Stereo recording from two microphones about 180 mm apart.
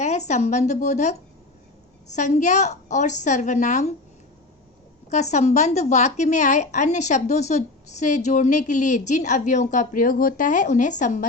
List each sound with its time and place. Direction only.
0.0 s a woman's voice: 40° left (ahead or behind)
5.1 s a woman's voice: 40° left (ahead or behind)